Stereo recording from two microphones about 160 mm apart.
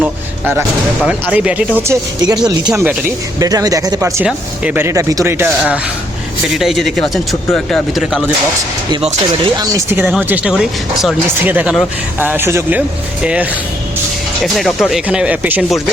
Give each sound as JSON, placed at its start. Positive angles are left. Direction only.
{"t": 0.0, "sound": "a sound", "side_deg": -15}
{"t": 1.0, "sound": "speech", "side_deg": -10}
{"t": 2.2, "sound": "speech", "side_deg": -25}
{"t": 9.6, "sound": "speech", "side_deg": -20}